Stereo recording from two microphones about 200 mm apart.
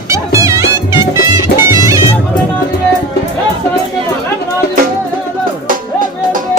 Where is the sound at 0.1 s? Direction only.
15° right (ahead or behind).